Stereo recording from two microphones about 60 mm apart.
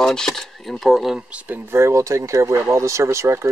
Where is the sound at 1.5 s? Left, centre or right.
Right.